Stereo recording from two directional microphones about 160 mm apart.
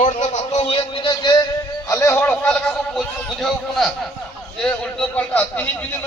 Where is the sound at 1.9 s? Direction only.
20° left (ahead or behind).